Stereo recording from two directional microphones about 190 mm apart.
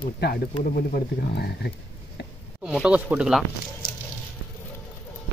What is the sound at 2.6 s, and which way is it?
Speech, 5° right (ahead or behind).